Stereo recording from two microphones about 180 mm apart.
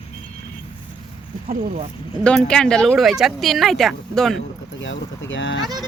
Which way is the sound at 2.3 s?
5° left (ahead or behind).